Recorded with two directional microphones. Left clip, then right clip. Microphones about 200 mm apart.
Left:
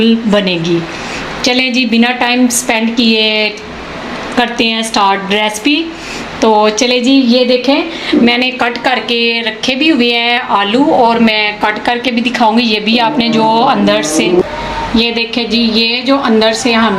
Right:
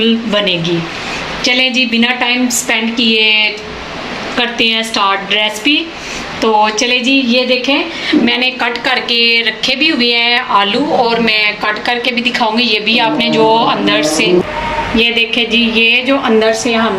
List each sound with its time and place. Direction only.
0.0 s a woman's voice: 45° left (ahead or behind)
14.9 s a woman's voice: 30° left (ahead or behind)